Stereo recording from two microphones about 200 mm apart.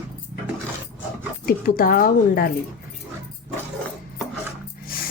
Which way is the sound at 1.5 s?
45° left (ahead or behind).